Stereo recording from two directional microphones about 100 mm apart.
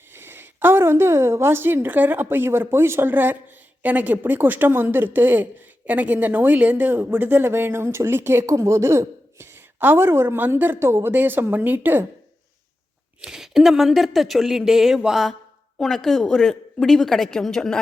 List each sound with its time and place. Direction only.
0.1 s speech: 25° right (ahead or behind)
13.2 s speech: 5° right (ahead or behind)